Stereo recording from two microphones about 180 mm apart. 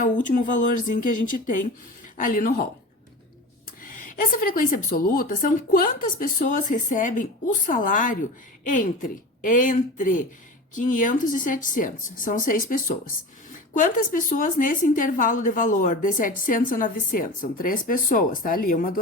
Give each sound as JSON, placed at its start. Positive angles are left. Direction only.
{"t": 0.0, "sound": "a woman's voice", "side_deg": 45}
{"t": 3.8, "sound": "a woman's voice", "side_deg": 50}